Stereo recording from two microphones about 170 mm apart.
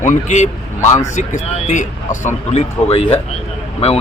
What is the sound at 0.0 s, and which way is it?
A man's voice, 45° left (ahead or behind).